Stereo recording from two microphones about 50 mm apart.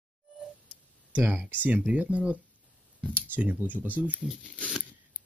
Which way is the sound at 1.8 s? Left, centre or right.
Right.